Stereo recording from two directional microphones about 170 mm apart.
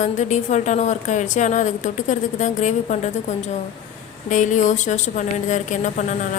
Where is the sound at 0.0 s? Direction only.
45° left (ahead or behind).